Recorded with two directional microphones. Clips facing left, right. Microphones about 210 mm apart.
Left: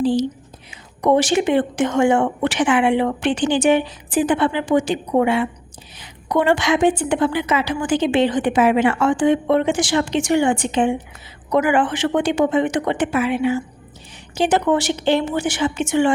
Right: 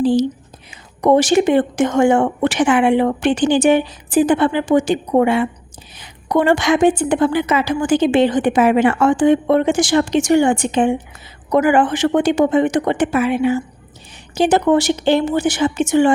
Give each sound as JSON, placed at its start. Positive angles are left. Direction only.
{"t": 0.0, "sound": "a woman's voice", "side_deg": -45}